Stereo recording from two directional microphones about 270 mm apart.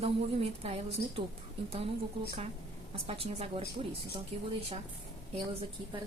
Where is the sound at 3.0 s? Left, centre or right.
Right.